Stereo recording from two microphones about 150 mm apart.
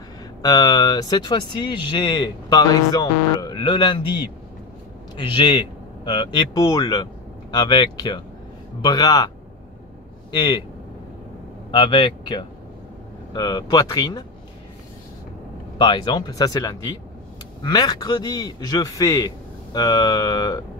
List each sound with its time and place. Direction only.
0.4 s a man's voice: 25° left (ahead or behind)
10.3 s speech: 30° left (ahead or behind)
11.7 s a man's voice: 35° left (ahead or behind)
15.8 s a man's voice: 30° left (ahead or behind)